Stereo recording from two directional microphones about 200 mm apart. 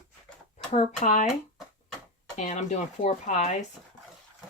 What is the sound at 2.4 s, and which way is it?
Speech, 35° left (ahead or behind).